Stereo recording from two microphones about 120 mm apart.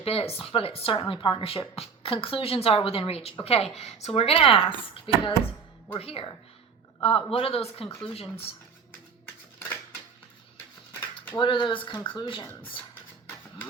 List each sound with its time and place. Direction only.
0.0 s a woman's voice: 55° left (ahead or behind)
11.3 s a woman's voice: 40° left (ahead or behind)